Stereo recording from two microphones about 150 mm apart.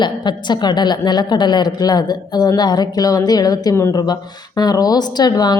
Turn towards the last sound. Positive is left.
turn(degrees=25)  # may be behind; listen again after turning